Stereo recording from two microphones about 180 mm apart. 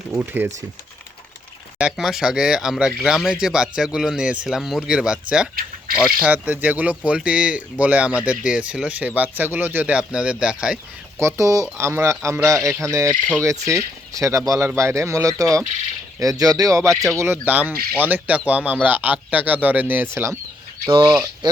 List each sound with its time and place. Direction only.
0.1 s speech: 15° right (ahead or behind)
1.8 s speech: centre (ahead or behind)
6.2 s speech: 10° right (ahead or behind)
11.2 s speech: 15° right (ahead or behind)
13.1 s speech: 10° left (ahead or behind)
13.7 s speech: 15° right (ahead or behind)
20.8 s speech: 25° right (ahead or behind)